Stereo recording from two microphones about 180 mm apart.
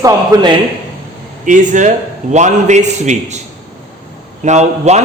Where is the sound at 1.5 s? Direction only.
45° right (ahead or behind).